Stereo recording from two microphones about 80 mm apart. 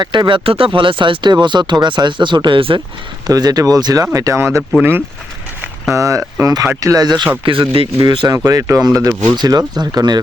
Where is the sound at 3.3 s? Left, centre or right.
Right.